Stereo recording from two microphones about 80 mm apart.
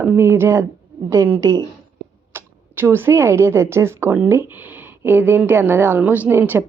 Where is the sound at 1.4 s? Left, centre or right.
Right.